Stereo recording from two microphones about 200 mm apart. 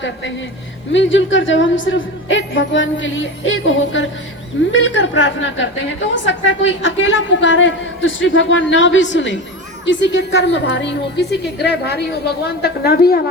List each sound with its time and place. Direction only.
0.9 s a woman's voice: 70° left (ahead or behind); by 13.1 s 50° left (ahead or behind)